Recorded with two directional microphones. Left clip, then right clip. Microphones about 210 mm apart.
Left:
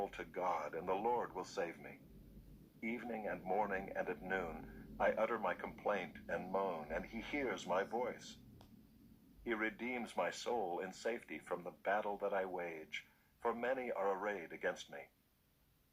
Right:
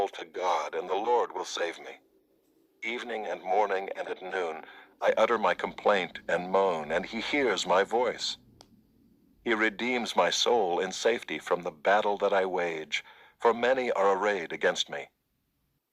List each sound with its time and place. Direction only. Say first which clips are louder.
0.0 s speech: right 10 dB; 35° right (ahead or behind)